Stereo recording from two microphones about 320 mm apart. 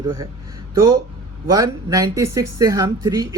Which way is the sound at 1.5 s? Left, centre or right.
Centre.